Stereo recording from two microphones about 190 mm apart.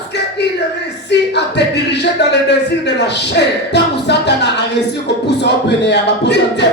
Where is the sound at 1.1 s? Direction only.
65° left (ahead or behind).